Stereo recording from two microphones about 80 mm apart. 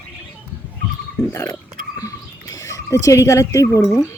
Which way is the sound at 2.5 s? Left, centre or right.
Left.